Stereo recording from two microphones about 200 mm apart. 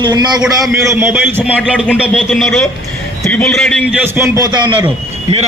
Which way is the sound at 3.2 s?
10° left (ahead or behind).